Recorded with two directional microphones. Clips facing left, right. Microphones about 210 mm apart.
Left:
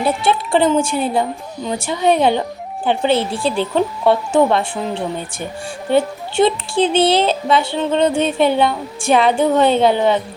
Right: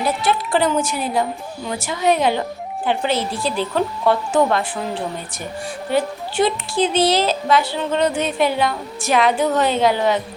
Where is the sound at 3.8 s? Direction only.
25° left (ahead or behind).